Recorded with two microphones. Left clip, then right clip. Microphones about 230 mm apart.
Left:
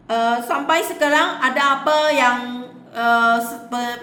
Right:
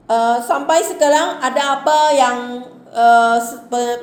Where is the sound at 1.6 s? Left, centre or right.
Left.